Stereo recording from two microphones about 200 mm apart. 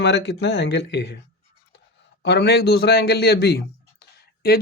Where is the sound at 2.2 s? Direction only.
55° left (ahead or behind).